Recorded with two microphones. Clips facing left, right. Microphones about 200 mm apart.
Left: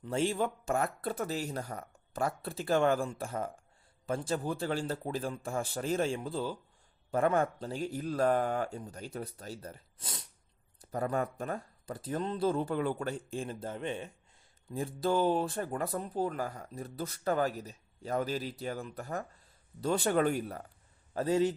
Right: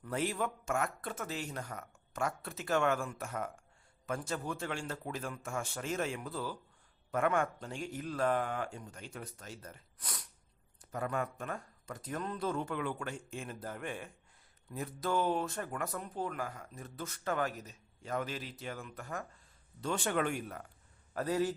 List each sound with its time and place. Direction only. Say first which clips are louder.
0.0 s speech: left 4 dB; 25° left (ahead or behind)
10.8 s a man's voice: left 4 dB; 35° left (ahead or behind)